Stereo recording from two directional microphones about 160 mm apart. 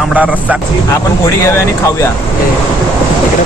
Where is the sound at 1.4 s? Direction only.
15° left (ahead or behind).